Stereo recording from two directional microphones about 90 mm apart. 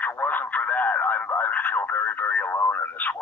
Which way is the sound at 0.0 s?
20° left (ahead or behind).